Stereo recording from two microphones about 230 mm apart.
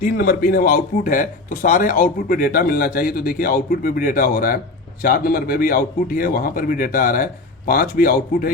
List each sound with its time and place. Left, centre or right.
0.0 s speech: left